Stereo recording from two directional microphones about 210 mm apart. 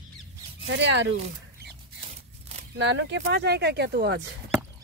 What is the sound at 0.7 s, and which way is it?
Speech, 60° right (ahead or behind).